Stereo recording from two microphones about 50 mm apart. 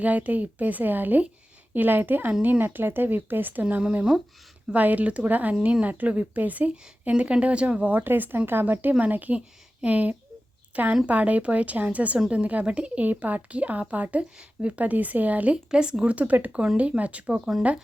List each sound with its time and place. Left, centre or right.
0.0 s speech: right
3.6 s speech: right
4.7 s speech: right
7.9 s speech: right
15.5 s speech: centre